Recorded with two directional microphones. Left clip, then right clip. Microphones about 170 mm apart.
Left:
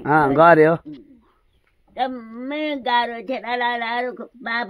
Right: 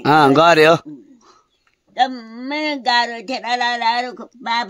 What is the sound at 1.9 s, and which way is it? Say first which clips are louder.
Speech: right 6 dB; 20° right (ahead or behind).